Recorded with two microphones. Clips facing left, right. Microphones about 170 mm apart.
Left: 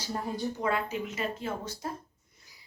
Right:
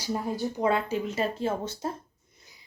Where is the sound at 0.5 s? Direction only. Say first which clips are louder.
Right 7 dB; 25° right (ahead or behind).